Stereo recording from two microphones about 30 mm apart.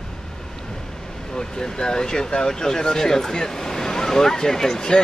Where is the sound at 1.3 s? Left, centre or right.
Left.